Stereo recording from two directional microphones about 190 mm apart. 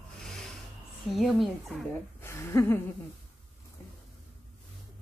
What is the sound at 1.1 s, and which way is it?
Speech, centre (ahead or behind).